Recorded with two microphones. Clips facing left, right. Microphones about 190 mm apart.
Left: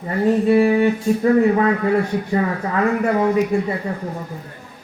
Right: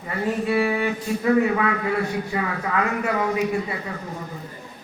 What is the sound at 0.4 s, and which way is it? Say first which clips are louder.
Speech: left 7 dB; 35° left (ahead or behind).